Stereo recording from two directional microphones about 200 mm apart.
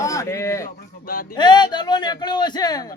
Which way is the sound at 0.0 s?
15° left (ahead or behind).